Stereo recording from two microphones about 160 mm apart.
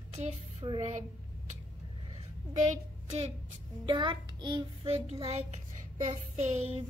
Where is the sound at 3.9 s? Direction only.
30° right (ahead or behind).